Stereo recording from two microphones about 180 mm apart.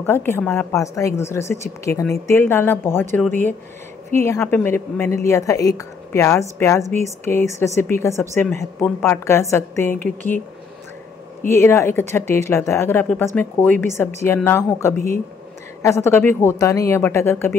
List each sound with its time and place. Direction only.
0.0 s a woman's voice: 10° left (ahead or behind)
11.4 s a woman's voice: 15° left (ahead or behind)